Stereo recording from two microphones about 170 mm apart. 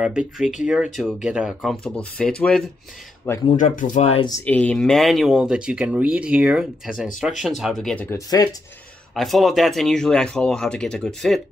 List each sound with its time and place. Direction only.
0.0 s speech: 5° right (ahead or behind)
3.4 s speech: 45° left (ahead or behind)
4.5 s speech: 5° left (ahead or behind)